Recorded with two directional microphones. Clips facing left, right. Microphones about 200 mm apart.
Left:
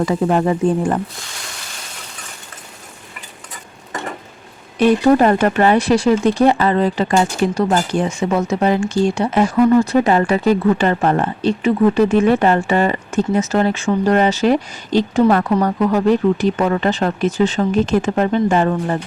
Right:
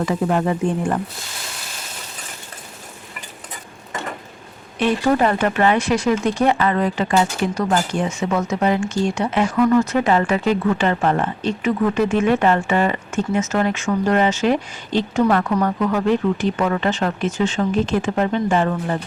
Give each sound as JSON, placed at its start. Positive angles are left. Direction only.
{"t": 0.0, "sound": "speech", "side_deg": 30}
{"t": 4.8, "sound": "speech", "side_deg": 40}